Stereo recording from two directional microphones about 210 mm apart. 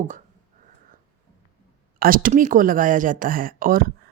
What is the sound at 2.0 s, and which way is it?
A woman's voice, 40° right (ahead or behind).